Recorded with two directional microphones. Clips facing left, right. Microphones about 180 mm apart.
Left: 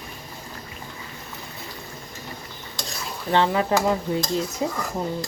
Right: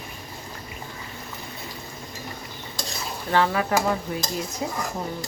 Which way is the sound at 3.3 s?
20° left (ahead or behind).